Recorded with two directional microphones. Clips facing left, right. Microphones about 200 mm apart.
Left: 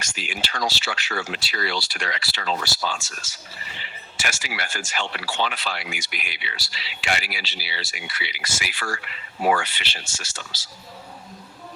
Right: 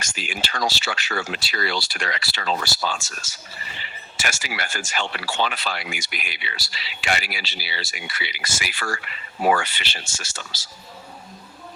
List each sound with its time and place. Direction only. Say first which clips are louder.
0.0 s speech: right 1 dB; 45° right (ahead or behind)